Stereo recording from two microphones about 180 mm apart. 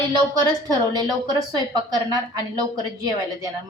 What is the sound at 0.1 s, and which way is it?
A woman's voice, 25° right (ahead or behind).